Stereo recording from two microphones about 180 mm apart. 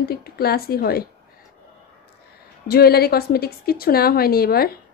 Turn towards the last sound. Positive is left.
turn(degrees=60)  # may be behind; listen again after turning